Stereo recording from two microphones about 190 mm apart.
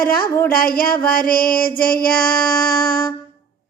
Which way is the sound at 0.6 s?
50° left (ahead or behind).